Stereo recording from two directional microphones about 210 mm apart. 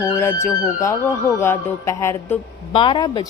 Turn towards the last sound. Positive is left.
turn(degrees=20)  # may be behind; listen again after turning